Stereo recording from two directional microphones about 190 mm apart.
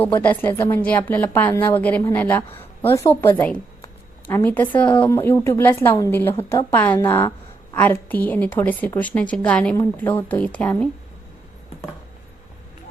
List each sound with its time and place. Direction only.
0.0 s a woman's voice: 10° left (ahead or behind)